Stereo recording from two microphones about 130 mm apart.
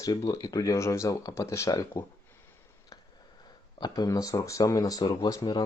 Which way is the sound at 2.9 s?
25° left (ahead or behind).